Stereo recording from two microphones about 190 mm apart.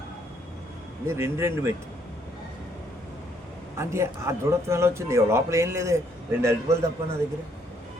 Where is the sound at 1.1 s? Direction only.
15° right (ahead or behind).